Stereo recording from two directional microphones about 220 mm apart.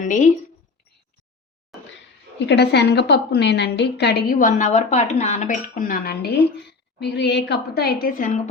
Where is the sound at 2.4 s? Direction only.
50° left (ahead or behind).